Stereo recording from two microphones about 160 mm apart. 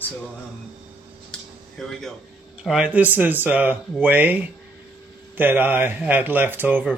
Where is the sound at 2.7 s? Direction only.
5° right (ahead or behind).